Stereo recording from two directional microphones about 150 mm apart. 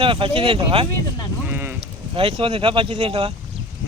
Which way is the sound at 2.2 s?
35° right (ahead or behind).